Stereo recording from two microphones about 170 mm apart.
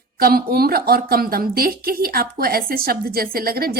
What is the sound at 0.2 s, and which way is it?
Speech, 65° right (ahead or behind).